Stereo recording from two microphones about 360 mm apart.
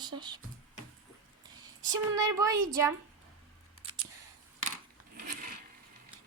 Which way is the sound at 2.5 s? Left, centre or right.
Right.